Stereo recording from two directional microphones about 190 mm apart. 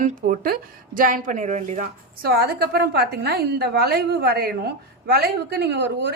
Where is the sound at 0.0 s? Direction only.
45° right (ahead or behind).